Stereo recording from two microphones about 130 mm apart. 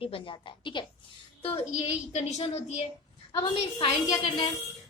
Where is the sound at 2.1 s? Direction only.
60° left (ahead or behind).